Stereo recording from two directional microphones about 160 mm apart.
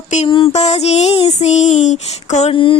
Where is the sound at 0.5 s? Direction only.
45° left (ahead or behind).